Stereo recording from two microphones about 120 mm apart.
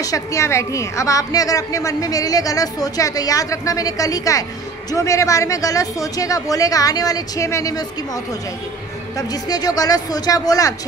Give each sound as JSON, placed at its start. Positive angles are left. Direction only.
{"t": 0.0, "sound": "a woman's voice", "side_deg": 25}
{"t": 9.3, "sound": "speech", "side_deg": 35}